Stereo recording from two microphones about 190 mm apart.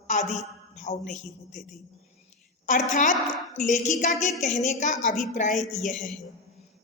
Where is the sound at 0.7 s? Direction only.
35° left (ahead or behind).